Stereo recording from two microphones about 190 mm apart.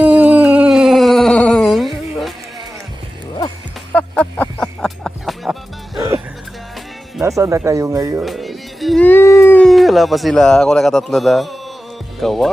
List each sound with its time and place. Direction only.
0.0 s a sound: 5° right (ahead or behind)
3.9 s music: 5° left (ahead or behind)
7.2 s speech: 15° right (ahead or behind)
8.2 s speech: centre (ahead or behind)